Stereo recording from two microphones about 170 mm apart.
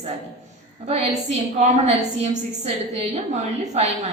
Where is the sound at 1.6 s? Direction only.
40° right (ahead or behind).